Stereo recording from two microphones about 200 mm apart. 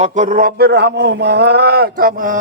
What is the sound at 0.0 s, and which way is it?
A man's voice, 40° right (ahead or behind).